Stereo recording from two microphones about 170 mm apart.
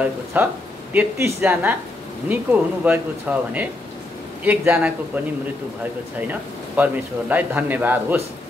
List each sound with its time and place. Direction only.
0.3 s speech: 10° right (ahead or behind)
6.8 s speech: 10° right (ahead or behind)